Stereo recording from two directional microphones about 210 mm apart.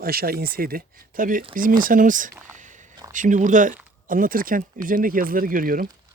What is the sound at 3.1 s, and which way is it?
Speech, 40° right (ahead or behind).